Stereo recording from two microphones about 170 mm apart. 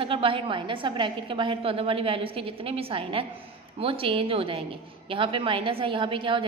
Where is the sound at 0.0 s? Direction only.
30° right (ahead or behind).